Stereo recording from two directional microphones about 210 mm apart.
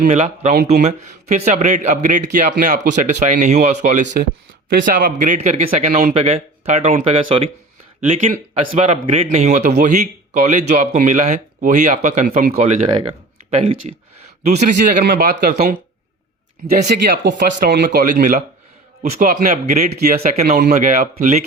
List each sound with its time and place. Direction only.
0.0 s a man's voice: 35° right (ahead or behind)
13.5 s a sound: 30° right (ahead or behind)
15.0 s speech: 45° right (ahead or behind)
16.9 s a man's voice: 50° right (ahead or behind); by 20.0 s 35° right (ahead or behind)
20.4 s a man's voice: 45° right (ahead or behind)